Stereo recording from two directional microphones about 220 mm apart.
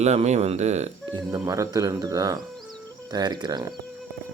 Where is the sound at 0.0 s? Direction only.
30° right (ahead or behind).